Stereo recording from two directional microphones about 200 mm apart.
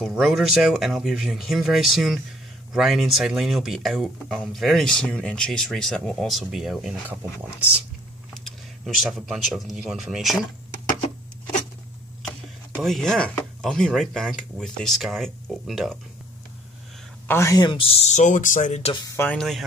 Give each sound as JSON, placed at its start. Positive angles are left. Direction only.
{"t": 0.0, "sound": "speech", "side_deg": 0}
{"t": 8.5, "sound": "speech", "side_deg": 0}
{"t": 12.7, "sound": "speech", "side_deg": 0}
{"t": 17.3, "sound": "speech", "side_deg": 15}
{"t": 19.1, "sound": "speech", "side_deg": 5}